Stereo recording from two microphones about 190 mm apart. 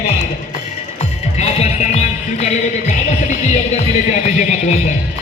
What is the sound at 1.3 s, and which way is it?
Music, 35° left (ahead or behind).